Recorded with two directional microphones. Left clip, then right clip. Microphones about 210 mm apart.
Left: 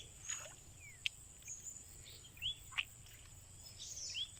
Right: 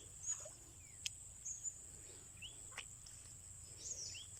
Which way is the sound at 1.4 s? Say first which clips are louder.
Right 2 dB; 50° left (ahead or behind).